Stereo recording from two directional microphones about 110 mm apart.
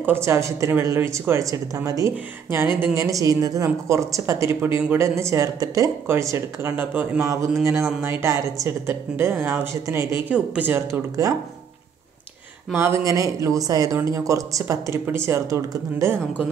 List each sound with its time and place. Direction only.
0.0 s speech: 25° right (ahead or behind)
7.2 s speech: 30° right (ahead or behind)
10.3 s speech: 10° right (ahead or behind)
12.7 s speech: 25° right (ahead or behind)